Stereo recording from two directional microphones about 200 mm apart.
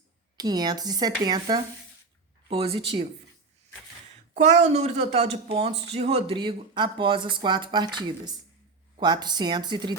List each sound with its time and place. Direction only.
0.3 s speech: 20° right (ahead or behind)
4.4 s speech: 35° right (ahead or behind)